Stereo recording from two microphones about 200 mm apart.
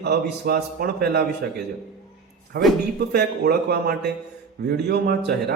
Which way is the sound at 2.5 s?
50° right (ahead or behind).